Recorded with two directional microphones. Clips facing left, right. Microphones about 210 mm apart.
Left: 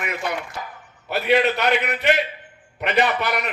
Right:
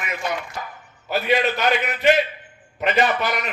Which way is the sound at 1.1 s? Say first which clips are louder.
Left 2 dB; 65° left (ahead or behind).